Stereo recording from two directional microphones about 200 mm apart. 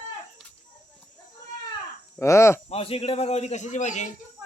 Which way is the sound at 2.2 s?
15° left (ahead or behind).